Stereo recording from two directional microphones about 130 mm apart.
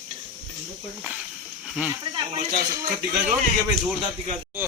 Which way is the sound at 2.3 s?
60° right (ahead or behind).